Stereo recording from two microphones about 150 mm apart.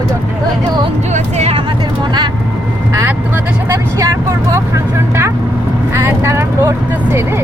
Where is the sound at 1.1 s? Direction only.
45° right (ahead or behind).